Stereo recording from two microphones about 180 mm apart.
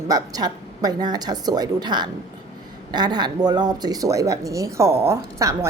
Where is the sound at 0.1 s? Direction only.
20° right (ahead or behind).